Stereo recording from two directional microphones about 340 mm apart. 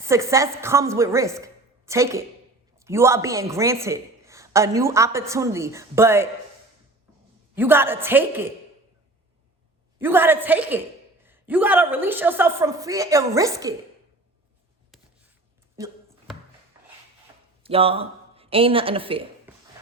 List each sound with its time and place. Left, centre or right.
0.0 s a man's voice: centre
7.5 s a man's voice: centre
10.0 s a man's voice: centre
17.6 s speech: centre